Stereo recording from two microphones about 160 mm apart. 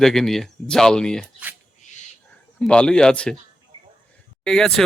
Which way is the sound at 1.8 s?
50° left (ahead or behind).